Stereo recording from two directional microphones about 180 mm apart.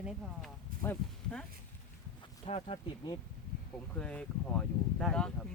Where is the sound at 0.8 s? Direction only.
10° left (ahead or behind).